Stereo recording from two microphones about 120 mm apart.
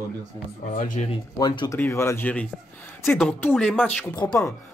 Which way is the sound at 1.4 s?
35° left (ahead or behind).